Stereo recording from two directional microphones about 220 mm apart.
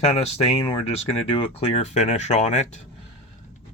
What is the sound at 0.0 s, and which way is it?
Speech, 25° left (ahead or behind).